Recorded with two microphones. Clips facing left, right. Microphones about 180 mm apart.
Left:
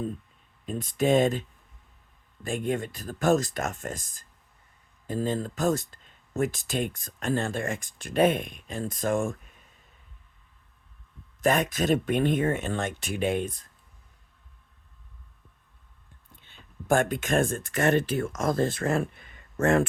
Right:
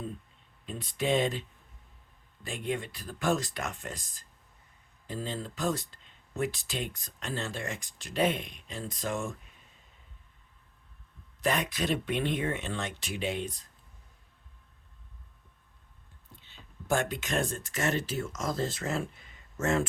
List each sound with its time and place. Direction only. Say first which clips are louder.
0.6 s speech: left 6 dB; 45° left (ahead or behind)
11.3 s speech: left 6 dB; 45° left (ahead or behind)
16.4 s speech: left 5 dB; 50° left (ahead or behind)